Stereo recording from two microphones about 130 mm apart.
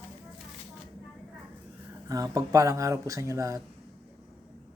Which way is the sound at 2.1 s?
25° right (ahead or behind).